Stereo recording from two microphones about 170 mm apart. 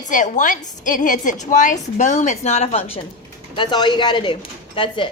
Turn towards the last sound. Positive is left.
turn(degrees=30)  # may be behind; listen again after turning